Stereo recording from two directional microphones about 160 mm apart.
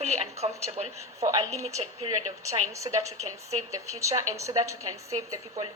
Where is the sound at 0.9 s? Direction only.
20° right (ahead or behind).